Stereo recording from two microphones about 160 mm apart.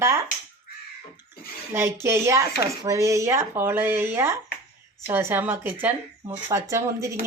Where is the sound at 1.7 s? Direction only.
15° right (ahead or behind).